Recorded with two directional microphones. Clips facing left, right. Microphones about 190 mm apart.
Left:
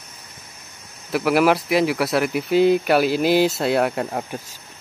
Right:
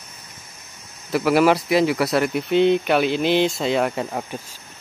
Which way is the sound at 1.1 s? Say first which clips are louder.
Right 1 dB; centre (ahead or behind).